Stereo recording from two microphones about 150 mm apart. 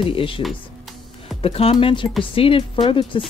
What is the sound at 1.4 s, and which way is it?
Speech, 40° left (ahead or behind).